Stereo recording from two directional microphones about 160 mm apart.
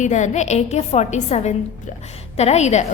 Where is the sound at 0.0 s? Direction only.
50° left (ahead or behind).